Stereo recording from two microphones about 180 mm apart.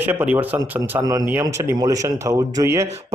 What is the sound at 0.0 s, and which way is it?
Speech, 10° right (ahead or behind).